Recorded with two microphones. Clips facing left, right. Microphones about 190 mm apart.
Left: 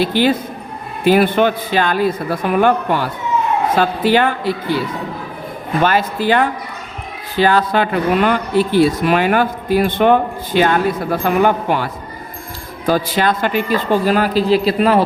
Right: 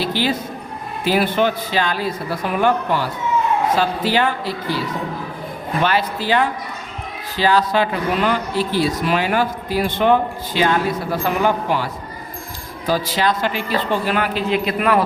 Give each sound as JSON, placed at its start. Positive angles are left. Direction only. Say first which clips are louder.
{"t": 0.0, "sound": "speech", "louder": "left 6 dB", "side_deg": 55}
{"t": 5.8, "sound": "speech", "louder": "left 4 dB", "side_deg": 45}